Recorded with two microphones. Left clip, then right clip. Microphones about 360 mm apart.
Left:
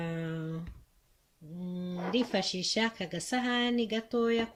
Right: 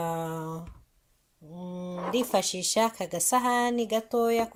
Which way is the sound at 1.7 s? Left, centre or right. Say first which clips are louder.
Right 4 dB; right.